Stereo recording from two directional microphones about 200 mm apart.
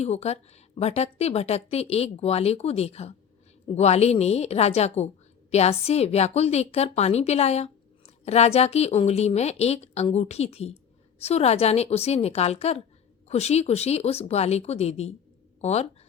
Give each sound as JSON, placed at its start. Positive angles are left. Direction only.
{"t": 0.0, "sound": "a woman's voice", "side_deg": 30}